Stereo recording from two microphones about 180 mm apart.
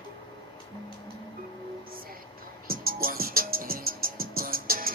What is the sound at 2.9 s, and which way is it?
Music, 55° right (ahead or behind).